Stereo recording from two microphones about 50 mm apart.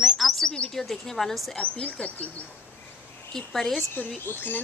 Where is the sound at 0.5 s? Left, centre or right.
Centre.